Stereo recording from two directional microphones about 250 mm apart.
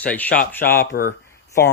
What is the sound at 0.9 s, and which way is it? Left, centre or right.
Speech, left.